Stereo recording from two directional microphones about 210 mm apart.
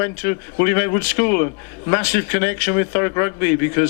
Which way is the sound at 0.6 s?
15° left (ahead or behind).